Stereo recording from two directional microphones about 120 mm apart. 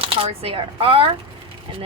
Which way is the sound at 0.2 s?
50° right (ahead or behind).